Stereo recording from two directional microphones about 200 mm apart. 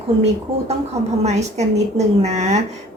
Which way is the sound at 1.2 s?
35° right (ahead or behind).